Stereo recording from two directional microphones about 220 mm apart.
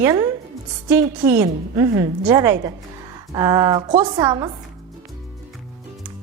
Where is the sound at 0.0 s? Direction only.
15° right (ahead or behind).